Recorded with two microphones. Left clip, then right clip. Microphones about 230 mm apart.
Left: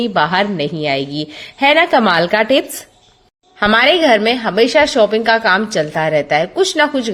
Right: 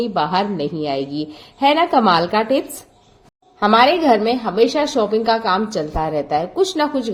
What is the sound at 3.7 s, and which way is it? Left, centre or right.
A woman's voice, left.